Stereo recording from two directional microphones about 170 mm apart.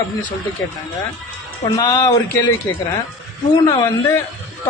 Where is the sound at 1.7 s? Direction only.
25° left (ahead or behind).